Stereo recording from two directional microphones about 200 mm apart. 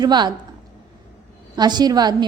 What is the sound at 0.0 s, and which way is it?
Speech, 20° right (ahead or behind).